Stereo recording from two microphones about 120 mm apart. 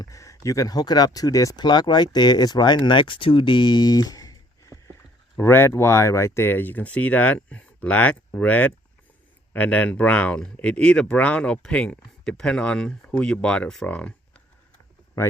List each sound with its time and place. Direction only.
0.0 s speech: 30° left (ahead or behind); by 14.4 s 10° left (ahead or behind)